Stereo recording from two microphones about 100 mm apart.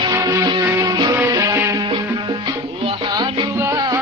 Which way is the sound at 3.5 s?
30° right (ahead or behind).